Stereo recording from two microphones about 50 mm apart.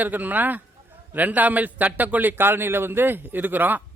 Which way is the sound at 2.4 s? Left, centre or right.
Right.